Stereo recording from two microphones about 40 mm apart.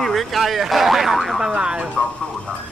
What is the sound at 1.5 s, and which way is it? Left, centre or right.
Speech, right.